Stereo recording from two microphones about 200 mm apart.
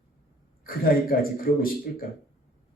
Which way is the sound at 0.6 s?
45° left (ahead or behind).